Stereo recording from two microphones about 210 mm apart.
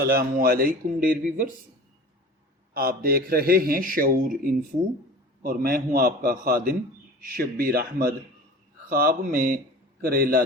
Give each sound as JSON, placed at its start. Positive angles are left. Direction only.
{"t": 0.0, "sound": "a man's voice", "side_deg": -45}
{"t": 2.7, "sound": "a man's voice", "side_deg": -45}